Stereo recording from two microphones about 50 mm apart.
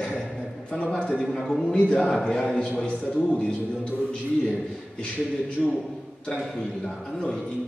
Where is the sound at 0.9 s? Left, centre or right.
Centre.